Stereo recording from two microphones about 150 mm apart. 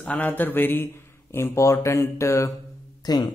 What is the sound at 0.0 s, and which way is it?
Speech, 10° left (ahead or behind).